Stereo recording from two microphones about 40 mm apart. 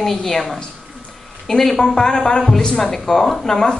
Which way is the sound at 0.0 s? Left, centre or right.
Centre.